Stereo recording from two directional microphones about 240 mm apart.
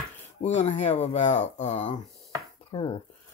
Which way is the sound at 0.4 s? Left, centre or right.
Left.